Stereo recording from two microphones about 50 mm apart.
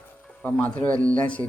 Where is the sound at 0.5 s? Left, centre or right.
Left.